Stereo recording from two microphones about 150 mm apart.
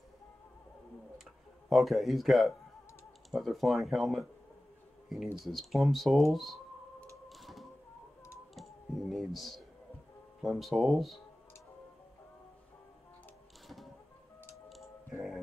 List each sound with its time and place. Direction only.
1.7 s speech: centre (ahead or behind)
5.4 s speech: centre (ahead or behind)
6.3 s a sound: centre (ahead or behind)
7.2 s typewriter: centre (ahead or behind)
8.5 s clicking: centre (ahead or behind)
10.4 s speech: 5° right (ahead or behind)
14.5 s music: centre (ahead or behind)